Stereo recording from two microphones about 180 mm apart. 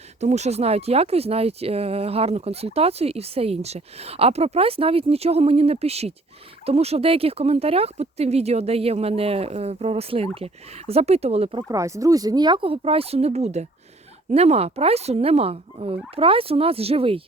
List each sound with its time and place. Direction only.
0.2 s speech: 40° right (ahead or behind)
11.7 s speech: 20° right (ahead or behind)